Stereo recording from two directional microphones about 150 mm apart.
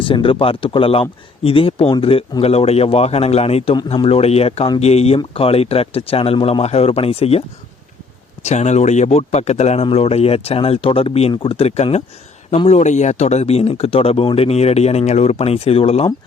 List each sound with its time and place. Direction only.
0.0 s a man's voice: 35° left (ahead or behind)
8.4 s a man's voice: 50° left (ahead or behind)